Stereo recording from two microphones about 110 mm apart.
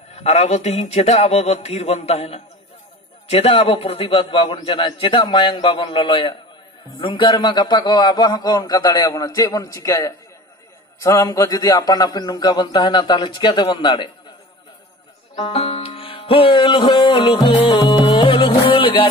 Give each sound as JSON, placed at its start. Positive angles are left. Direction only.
{"t": 0.1, "sound": "a man's voice", "side_deg": 85}
{"t": 15.4, "sound": "music", "side_deg": 60}
{"t": 18.3, "sound": "music", "side_deg": 55}